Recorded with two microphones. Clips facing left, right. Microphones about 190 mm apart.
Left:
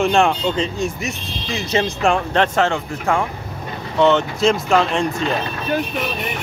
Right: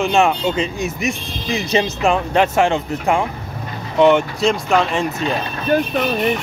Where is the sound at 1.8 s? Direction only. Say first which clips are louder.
Right 1 dB; 5° right (ahead or behind).